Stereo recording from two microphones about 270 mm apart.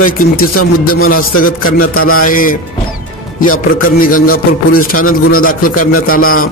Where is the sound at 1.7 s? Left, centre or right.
Left.